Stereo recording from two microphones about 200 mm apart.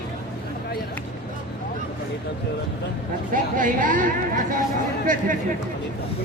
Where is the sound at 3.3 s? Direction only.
40° right (ahead or behind).